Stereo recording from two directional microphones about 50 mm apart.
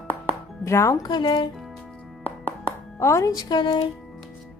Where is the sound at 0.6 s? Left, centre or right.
Left.